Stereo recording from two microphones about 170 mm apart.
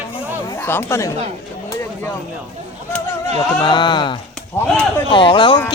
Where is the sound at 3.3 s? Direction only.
25° left (ahead or behind).